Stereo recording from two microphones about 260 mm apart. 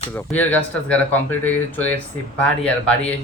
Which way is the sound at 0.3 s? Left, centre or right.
Centre.